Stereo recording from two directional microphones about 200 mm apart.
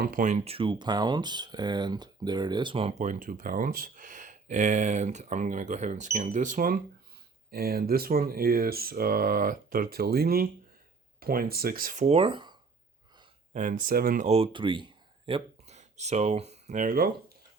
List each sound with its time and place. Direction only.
0.0 s speech: 40° right (ahead or behind); by 2.9 s 25° right (ahead or behind)
3.0 s speech: 40° right (ahead or behind); by 12.5 s 25° right (ahead or behind)
13.5 s speech: 40° right (ahead or behind)
14.3 s speech: 30° right (ahead or behind)